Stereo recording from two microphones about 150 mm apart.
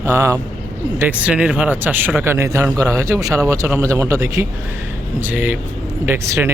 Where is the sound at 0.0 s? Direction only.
15° right (ahead or behind).